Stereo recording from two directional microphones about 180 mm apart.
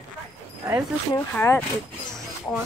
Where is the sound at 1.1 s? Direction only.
15° left (ahead or behind).